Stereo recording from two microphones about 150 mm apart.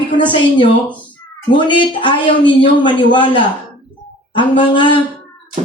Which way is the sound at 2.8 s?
30° left (ahead or behind).